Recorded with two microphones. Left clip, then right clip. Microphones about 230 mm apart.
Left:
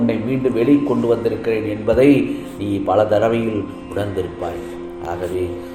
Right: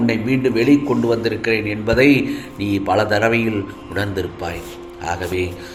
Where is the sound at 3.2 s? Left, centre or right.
Right.